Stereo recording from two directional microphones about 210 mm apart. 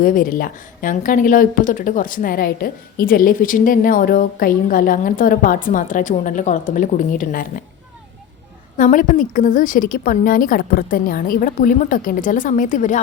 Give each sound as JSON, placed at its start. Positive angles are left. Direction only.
{"t": 0.0, "sound": "speech", "side_deg": 40}
{"t": 8.8, "sound": "speech", "side_deg": 40}